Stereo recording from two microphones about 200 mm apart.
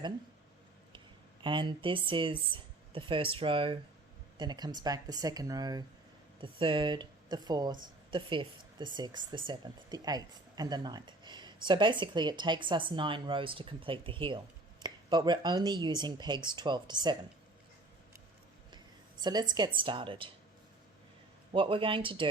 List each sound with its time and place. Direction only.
0.9 s speech: 25° right (ahead or behind)
19.2 s speech: 20° right (ahead or behind)
21.5 s speech: 25° right (ahead or behind)